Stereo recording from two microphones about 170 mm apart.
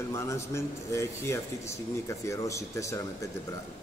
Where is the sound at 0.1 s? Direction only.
15° left (ahead or behind).